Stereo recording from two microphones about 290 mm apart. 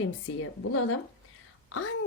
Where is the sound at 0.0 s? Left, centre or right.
Left.